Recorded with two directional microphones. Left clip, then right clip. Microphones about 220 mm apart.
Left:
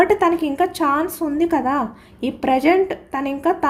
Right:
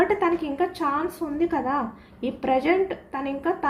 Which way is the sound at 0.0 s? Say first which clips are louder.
Left 6 dB; 55° left (ahead or behind).